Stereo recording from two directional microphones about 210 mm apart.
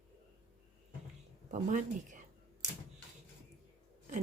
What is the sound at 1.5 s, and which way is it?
Speech, 35° right (ahead or behind).